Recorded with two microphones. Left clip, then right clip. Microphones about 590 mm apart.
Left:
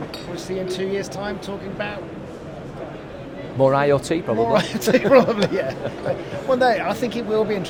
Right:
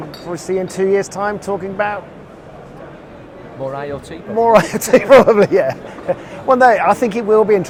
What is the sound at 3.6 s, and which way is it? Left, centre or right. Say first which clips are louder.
Speech: left 8 dB; left.